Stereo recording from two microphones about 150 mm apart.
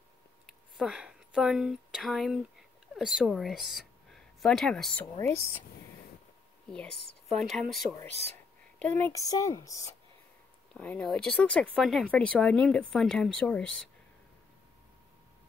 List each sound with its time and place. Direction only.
0.5 s a woman's voice: 5° right (ahead or behind)
7.3 s speech: centre (ahead or behind)
8.7 s speech: 10° left (ahead or behind)
10.7 s speech: 5° left (ahead or behind)